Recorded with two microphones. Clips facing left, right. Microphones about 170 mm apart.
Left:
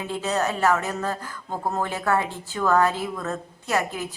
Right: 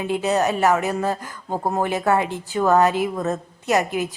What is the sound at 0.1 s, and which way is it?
A woman's voice, 15° right (ahead or behind).